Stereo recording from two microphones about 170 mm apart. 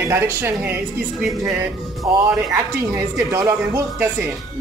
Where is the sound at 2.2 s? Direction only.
15° right (ahead or behind).